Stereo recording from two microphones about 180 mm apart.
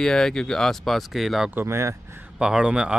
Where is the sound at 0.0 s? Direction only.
5° left (ahead or behind).